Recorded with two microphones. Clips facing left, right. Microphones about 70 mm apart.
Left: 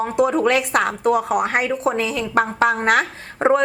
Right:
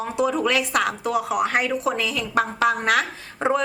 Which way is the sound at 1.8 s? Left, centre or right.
Left.